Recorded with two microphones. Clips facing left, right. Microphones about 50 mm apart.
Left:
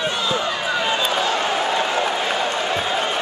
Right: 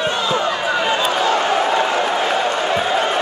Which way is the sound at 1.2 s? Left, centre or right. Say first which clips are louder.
Right 4 dB; right.